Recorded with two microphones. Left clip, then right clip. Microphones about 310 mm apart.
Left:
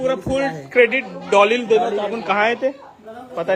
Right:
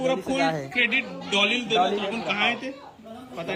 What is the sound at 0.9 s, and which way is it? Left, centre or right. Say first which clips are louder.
Speech: left 5 dB; centre.